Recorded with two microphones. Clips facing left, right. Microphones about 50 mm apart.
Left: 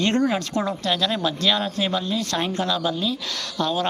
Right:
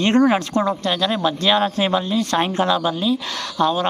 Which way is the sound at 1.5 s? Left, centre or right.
Right.